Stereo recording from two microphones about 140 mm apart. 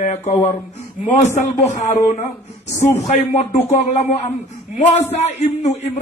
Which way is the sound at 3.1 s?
55° left (ahead or behind).